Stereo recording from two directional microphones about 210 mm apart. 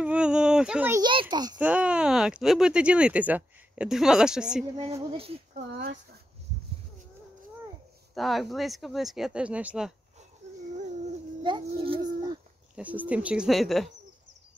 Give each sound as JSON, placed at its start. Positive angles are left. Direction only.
{"t": 0.0, "sound": "speech", "side_deg": -5}
{"t": 1.3, "sound": "speech", "side_deg": -20}
{"t": 1.6, "sound": "speech", "side_deg": -5}
{"t": 5.1, "sound": "speech", "side_deg": -25}
{"t": 8.1, "sound": "speech", "side_deg": 0}
{"t": 11.4, "sound": "a sound", "side_deg": -25}
{"t": 12.7, "sound": "speech", "side_deg": -5}